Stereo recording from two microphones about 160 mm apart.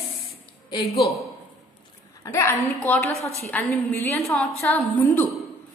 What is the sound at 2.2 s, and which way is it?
Speech, 15° left (ahead or behind).